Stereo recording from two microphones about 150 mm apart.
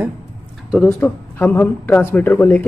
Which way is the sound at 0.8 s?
15° left (ahead or behind).